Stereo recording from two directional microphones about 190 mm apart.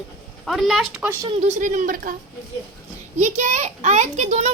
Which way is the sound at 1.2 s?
30° right (ahead or behind).